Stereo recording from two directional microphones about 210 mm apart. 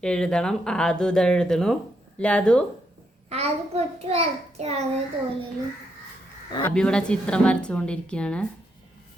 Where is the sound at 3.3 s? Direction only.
30° right (ahead or behind).